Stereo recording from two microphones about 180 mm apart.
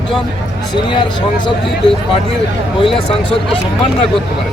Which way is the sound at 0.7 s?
25° left (ahead or behind).